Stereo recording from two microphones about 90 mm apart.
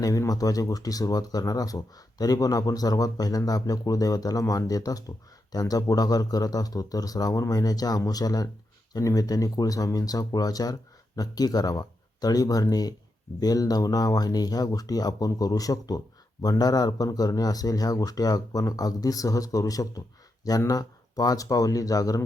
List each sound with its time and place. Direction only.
0.0 s speech: 40° left (ahead or behind)